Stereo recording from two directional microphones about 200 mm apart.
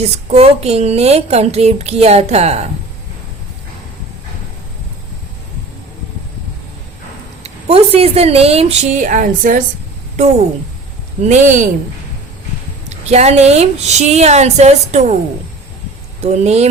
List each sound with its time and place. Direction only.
0.0 s a woman's voice: 30° right (ahead or behind)
7.4 s a woman's voice: 30° right (ahead or behind)
11.2 s a woman's voice: 35° right (ahead or behind)
12.9 s a woman's voice: 35° right (ahead or behind)
16.2 s a woman's voice: 35° right (ahead or behind)